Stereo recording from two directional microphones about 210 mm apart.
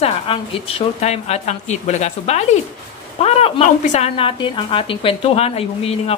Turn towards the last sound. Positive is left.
turn(degrees=30)  # may be behind; listen again after turning